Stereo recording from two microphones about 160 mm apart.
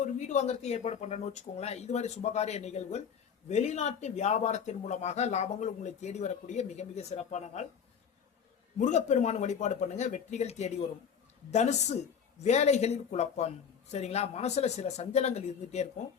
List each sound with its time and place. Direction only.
0.0 s speech: 50° left (ahead or behind)
8.8 s speech: 45° left (ahead or behind)